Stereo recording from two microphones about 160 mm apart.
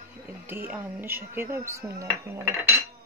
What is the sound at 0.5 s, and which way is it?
Speech, 10° right (ahead or behind).